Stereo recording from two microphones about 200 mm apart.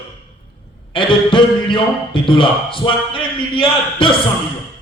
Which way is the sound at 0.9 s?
25° left (ahead or behind).